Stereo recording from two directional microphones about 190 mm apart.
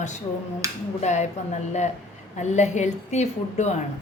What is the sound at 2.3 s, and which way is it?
A woman's voice, 40° left (ahead or behind).